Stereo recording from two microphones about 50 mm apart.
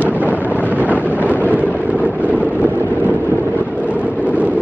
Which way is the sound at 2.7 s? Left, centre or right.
Right.